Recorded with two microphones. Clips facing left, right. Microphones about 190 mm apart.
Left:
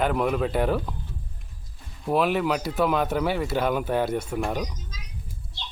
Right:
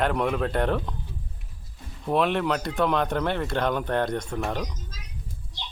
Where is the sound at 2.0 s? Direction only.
5° left (ahead or behind).